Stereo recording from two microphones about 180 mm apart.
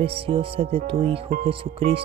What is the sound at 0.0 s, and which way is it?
Speech, 30° right (ahead or behind).